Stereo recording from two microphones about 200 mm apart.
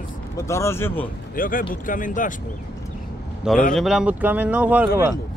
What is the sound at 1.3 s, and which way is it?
Speech, 45° left (ahead or behind).